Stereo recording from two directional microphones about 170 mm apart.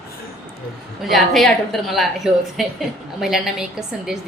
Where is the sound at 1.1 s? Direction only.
Centre (ahead or behind).